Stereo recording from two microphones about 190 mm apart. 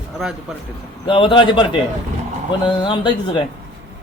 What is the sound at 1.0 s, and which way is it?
Speech, 25° left (ahead or behind).